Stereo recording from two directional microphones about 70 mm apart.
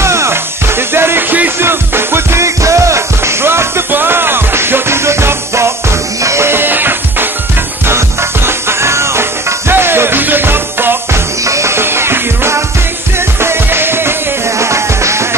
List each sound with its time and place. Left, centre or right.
0.0 s music: right
11.4 s music: right